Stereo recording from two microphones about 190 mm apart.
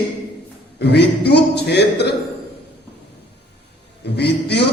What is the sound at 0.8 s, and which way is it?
A man's voice, 60° left (ahead or behind).